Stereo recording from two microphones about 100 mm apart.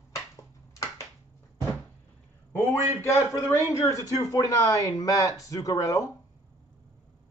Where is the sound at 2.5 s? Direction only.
25° left (ahead or behind).